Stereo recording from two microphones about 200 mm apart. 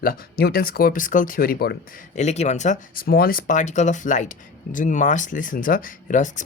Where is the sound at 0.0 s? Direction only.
50° left (ahead or behind).